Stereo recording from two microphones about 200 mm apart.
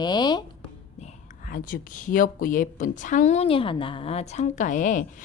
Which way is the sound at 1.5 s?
45° left (ahead or behind).